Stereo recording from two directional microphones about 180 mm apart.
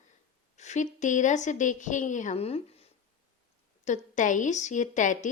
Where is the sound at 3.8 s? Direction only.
45° left (ahead or behind).